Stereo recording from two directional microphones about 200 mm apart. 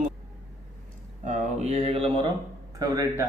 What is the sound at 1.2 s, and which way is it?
Speech, 35° right (ahead or behind).